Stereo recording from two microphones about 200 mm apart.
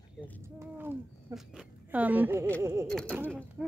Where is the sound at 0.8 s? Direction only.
5° right (ahead or behind).